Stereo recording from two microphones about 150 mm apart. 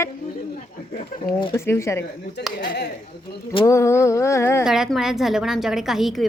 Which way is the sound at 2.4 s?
90° left.